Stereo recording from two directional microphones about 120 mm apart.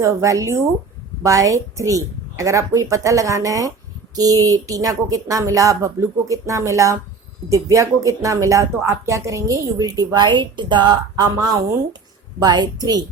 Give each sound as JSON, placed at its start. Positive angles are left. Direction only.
{"t": 0.0, "sound": "a woman's voice", "side_deg": -25}